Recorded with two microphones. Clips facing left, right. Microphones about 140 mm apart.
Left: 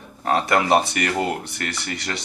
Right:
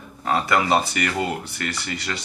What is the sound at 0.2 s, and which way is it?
Speech, 55° left (ahead or behind).